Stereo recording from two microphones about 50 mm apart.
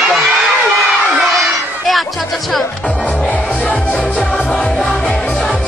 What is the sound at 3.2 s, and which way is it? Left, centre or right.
Music, left.